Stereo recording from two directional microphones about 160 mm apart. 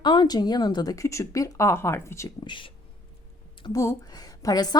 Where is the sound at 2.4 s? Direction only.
30° left (ahead or behind).